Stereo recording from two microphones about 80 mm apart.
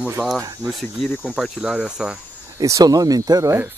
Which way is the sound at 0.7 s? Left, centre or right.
Centre.